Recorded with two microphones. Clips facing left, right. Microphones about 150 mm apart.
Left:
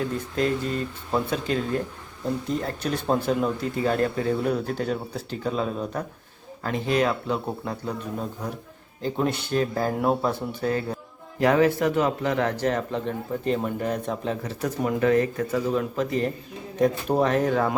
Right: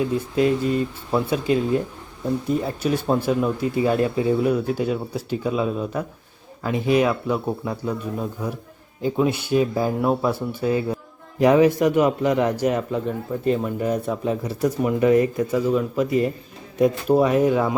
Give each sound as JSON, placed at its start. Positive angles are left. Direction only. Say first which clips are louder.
{"t": 0.0, "sound": "speech", "louder": "right 5 dB", "side_deg": -10}
{"t": 9.0, "sound": "speech", "louder": "right 4 dB", "side_deg": -10}
{"t": 10.6, "sound": "speech", "louder": "right 5 dB", "side_deg": -10}